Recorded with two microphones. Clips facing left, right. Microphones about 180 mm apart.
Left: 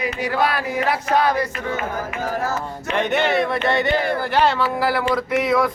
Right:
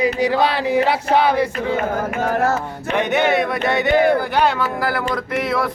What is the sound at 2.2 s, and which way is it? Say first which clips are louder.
Music: right 6 dB; 65° right (ahead or behind).